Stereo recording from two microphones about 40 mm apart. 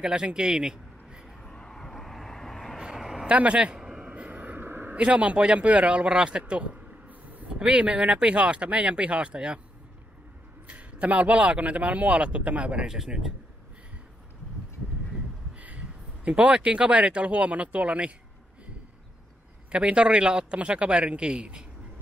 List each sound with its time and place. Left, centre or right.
0.0 s a man's voice: right
1.4 s vehicle: centre
3.0 s vehicle: centre
3.3 s speech: right
3.7 s a sound: centre
4.0 s vehicle: right
4.6 s a sound: right
4.9 s speech: right
7.1 s a sound: right
7.5 s speech: right
10.7 s a man's voice: right
12.8 s speech: centre
15.6 s speech: right
19.7 s speech: right